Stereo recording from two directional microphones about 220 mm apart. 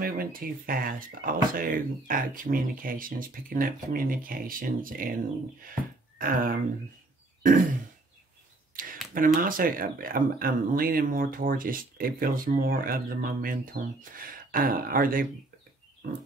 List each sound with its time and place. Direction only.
0.0 s speech: 40° right (ahead or behind)
9.1 s speech: 40° right (ahead or behind)